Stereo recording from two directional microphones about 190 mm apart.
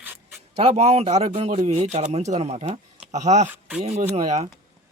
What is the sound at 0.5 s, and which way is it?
A man's voice, 35° right (ahead or behind).